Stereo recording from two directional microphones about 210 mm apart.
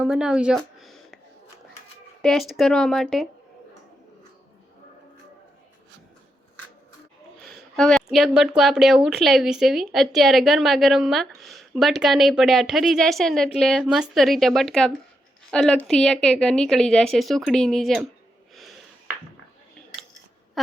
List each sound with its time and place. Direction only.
0.0 s a sound: 5° right (ahead or behind)
2.2 s a woman's voice: centre (ahead or behind)
7.4 s a woman's voice: 5° left (ahead or behind)